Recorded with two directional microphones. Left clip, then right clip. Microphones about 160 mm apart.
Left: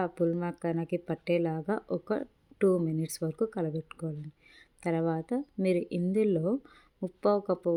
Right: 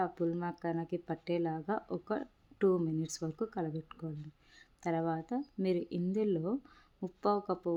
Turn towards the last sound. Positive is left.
turn(degrees=30)  # may be behind; listen again after turning